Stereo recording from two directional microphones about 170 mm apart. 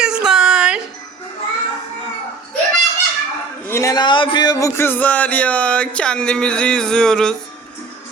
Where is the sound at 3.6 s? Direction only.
15° left (ahead or behind).